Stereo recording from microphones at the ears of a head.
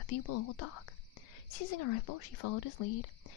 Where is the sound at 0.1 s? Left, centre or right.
Left.